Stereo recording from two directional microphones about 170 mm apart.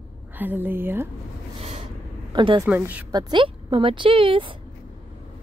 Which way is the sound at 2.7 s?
10° right (ahead or behind).